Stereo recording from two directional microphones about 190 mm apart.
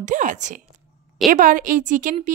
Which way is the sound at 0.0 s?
40° right (ahead or behind).